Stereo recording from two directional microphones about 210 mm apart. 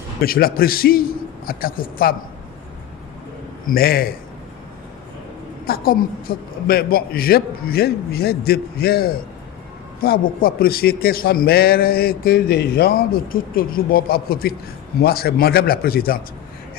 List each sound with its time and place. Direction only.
0.2 s a man's voice: 45° left (ahead or behind)
3.7 s a man's voice: 45° left (ahead or behind)
5.6 s a man's voice: 45° left (ahead or behind)